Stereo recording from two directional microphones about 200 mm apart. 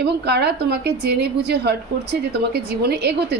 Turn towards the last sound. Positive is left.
turn(degrees=-55)  # may be behind; listen again after turning